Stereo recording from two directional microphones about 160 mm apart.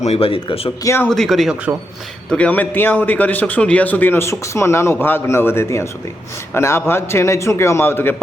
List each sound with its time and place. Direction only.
0.0 s speech: 40° left (ahead or behind)
1.1 s a man's voice: centre (ahead or behind)